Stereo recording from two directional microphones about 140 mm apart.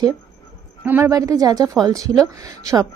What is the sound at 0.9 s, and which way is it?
A woman's voice, 15° right (ahead or behind).